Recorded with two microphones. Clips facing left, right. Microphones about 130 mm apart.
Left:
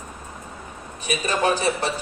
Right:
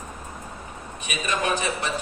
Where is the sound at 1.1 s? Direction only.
35° left (ahead or behind).